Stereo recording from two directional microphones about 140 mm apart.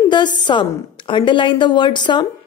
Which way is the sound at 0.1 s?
35° left (ahead or behind).